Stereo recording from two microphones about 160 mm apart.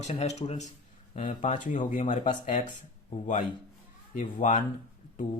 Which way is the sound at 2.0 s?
45° left (ahead or behind).